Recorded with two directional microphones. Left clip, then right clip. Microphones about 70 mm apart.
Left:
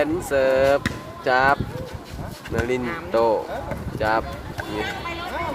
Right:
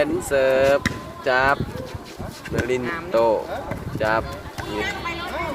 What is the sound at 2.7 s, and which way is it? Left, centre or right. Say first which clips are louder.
Speech: right 2 dB; left.